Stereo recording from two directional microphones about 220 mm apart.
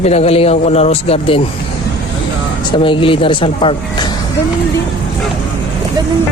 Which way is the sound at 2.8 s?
25° left (ahead or behind).